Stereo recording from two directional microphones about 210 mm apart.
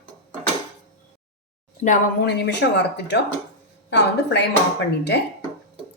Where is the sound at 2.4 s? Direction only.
55° left (ahead or behind).